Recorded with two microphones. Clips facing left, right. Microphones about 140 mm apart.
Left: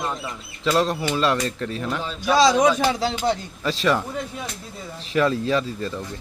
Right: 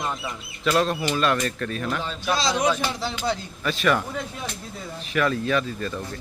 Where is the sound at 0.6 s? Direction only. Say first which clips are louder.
Left 1 dB; 20° left (ahead or behind).